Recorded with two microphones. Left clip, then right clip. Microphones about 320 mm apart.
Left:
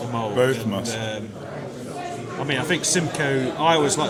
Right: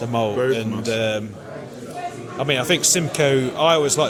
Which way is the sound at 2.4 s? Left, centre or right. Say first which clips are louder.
Right 5 dB; right.